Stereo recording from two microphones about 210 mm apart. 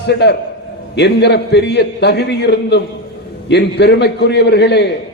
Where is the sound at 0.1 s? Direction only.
50° left (ahead or behind).